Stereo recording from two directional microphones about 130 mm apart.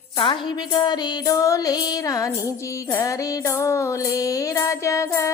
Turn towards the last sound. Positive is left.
turn(degrees=25)  # may be behind; listen again after turning